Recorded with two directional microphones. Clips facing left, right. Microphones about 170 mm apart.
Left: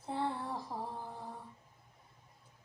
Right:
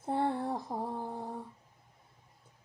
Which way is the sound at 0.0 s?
55° right (ahead or behind).